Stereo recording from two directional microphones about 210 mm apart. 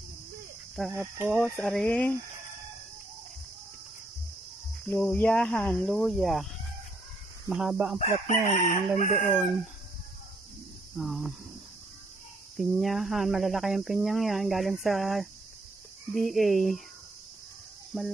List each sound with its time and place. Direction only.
0.9 s cricket: 10° right (ahead or behind)
1.4 s speech: 5° left (ahead or behind)
4.8 s speech: 10° left (ahead or behind)
7.4 s speech: 5° right (ahead or behind)
8.0 s chicken: 35° left (ahead or behind)
11.0 s speech: centre (ahead or behind)
12.5 s speech: centre (ahead or behind)